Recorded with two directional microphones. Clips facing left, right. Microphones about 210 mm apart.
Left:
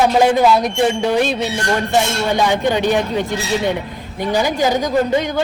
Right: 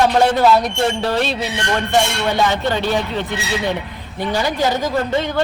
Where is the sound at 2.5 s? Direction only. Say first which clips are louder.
Left 3 dB; 15° left (ahead or behind).